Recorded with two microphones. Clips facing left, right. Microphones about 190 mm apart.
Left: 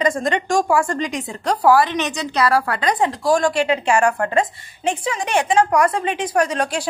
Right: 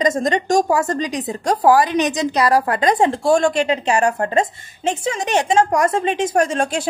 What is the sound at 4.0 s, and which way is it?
Speech, 25° right (ahead or behind).